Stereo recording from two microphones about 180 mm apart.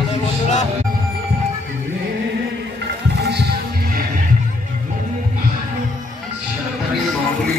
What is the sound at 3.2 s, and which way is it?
Music, 65° right (ahead or behind).